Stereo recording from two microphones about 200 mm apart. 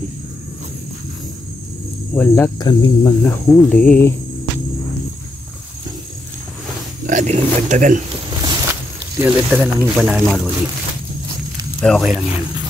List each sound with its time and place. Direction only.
2.1 s speech: 10° left (ahead or behind)
2.6 s speech: 20° left (ahead or behind)
3.2 s speech: 5° left (ahead or behind)
7.1 s speech: 35° right (ahead or behind)
8.3 s a sound: 20° right (ahead or behind)
9.2 s speech: 10° right (ahead or behind)
11.8 s speech: centre (ahead or behind)